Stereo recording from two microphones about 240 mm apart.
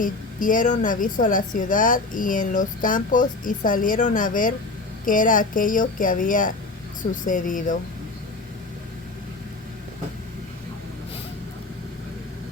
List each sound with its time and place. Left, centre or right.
0.0 s a woman's voice: left